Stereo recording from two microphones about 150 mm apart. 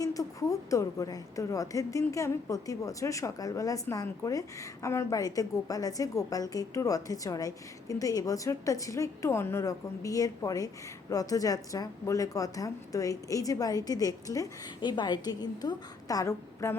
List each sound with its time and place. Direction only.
0.0 s a woman's voice: 25° left (ahead or behind)